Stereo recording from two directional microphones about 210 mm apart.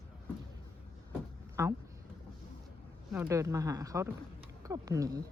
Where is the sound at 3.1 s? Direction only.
10° right (ahead or behind).